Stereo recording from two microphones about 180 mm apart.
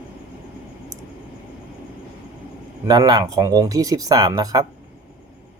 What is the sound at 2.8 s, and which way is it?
Speech, 20° right (ahead or behind).